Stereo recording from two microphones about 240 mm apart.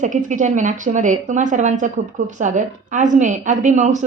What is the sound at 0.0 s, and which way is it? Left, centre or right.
A woman's voice, right.